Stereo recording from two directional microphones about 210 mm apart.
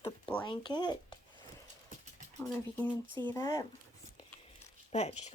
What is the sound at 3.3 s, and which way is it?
Speech, 15° left (ahead or behind).